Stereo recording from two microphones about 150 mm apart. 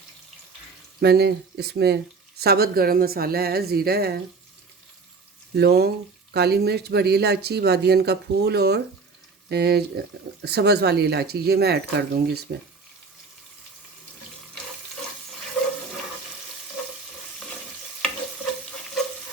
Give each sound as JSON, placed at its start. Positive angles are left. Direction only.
{"t": 1.0, "sound": "speech", "side_deg": -90}
{"t": 5.5, "sound": "speech", "side_deg": -90}